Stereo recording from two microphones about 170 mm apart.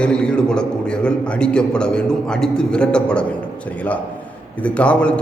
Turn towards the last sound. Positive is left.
turn(degrees=5)  # may be behind; listen again after turning